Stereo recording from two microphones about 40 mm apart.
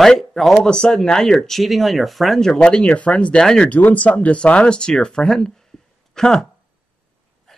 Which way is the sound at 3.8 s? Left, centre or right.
Left.